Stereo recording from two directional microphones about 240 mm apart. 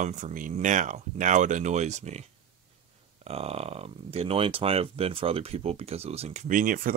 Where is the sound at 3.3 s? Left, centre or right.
Right.